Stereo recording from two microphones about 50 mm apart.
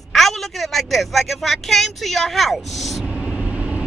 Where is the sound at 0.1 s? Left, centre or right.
Centre.